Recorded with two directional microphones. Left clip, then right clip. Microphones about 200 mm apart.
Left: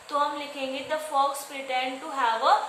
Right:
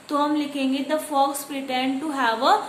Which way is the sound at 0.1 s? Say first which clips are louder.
Right 4 dB; 45° right (ahead or behind).